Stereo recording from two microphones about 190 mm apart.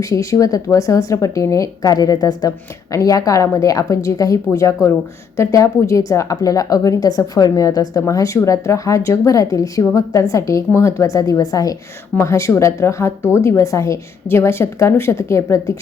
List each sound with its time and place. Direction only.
0.0 s a woman's voice: 15° left (ahead or behind)